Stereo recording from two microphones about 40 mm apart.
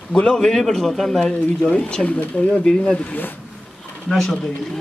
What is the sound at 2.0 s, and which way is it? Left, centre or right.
Speech, left.